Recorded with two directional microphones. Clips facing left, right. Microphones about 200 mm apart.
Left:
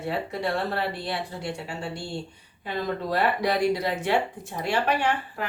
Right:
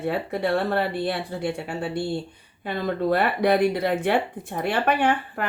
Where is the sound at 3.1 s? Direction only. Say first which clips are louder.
Right 4 dB; 55° right (ahead or behind).